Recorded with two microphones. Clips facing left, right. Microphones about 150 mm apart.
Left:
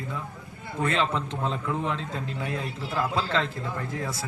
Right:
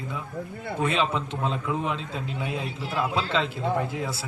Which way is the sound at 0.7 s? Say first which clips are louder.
Right 1 dB; 15° right (ahead or behind).